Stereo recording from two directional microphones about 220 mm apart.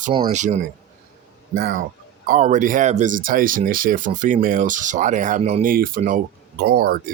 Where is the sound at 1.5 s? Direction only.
40° right (ahead or behind).